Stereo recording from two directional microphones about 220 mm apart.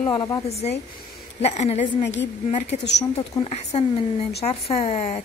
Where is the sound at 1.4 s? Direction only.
30° left (ahead or behind).